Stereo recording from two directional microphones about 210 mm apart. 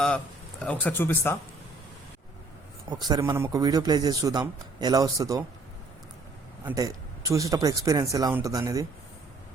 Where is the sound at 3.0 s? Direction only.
20° right (ahead or behind).